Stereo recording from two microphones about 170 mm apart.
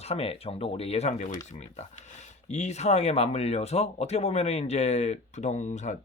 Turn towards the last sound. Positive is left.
turn(degrees=45)  # may be behind; listen again after turning